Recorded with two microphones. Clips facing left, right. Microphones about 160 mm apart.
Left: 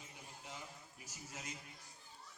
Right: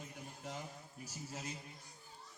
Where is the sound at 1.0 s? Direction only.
35° right (ahead or behind).